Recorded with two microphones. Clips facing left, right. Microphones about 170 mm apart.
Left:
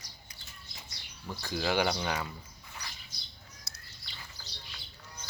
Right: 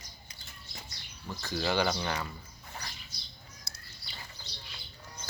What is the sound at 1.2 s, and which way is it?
Speech, 10° left (ahead or behind).